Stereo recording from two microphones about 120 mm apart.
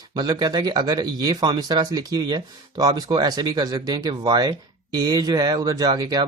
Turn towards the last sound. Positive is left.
turn(degrees=-35)  # may be behind; listen again after turning